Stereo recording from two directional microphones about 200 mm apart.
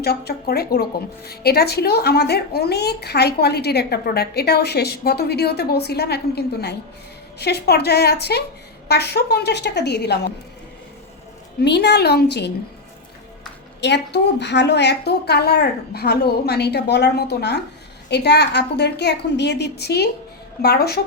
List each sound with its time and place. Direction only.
0.0 s a woman's voice: 50° left (ahead or behind)
11.6 s a woman's voice: 55° left (ahead or behind)
13.8 s a woman's voice: 60° left (ahead or behind)